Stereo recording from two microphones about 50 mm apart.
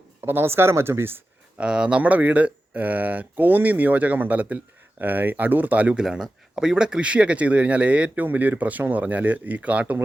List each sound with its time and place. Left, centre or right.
0.2 s speech: right
1.5 s speech: centre
2.0 s speech: right
6.0 s speech: centre; by 10.0 s right